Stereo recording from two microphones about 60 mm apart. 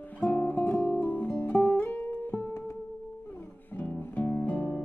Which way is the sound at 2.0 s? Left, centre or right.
Left.